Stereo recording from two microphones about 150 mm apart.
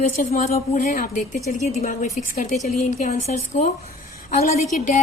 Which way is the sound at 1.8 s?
60° left (ahead or behind).